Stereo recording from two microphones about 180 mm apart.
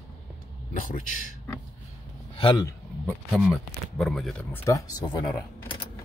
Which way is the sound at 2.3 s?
25° left (ahead or behind).